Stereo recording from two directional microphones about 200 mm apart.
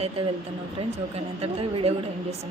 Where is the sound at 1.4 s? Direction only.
30° right (ahead or behind).